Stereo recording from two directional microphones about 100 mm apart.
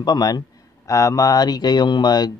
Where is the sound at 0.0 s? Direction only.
40° left (ahead or behind).